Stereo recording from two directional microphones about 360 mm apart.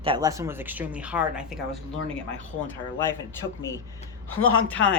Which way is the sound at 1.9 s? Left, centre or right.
Left.